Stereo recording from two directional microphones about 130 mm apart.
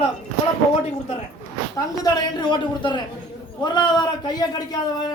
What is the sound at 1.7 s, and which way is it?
Speech, 30° left (ahead or behind).